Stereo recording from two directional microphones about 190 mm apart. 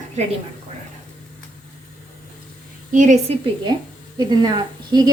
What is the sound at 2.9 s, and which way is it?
A woman's voice, 40° right (ahead or behind).